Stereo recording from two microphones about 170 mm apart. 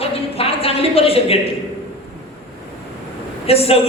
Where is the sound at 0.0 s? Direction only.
35° left (ahead or behind).